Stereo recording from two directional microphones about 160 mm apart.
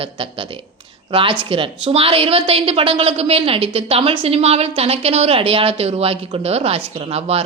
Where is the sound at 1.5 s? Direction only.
35° right (ahead or behind).